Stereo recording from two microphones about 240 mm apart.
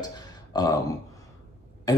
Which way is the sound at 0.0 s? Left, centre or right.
Centre.